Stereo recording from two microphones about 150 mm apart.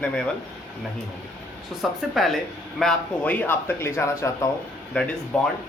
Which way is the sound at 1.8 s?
Centre (ahead or behind).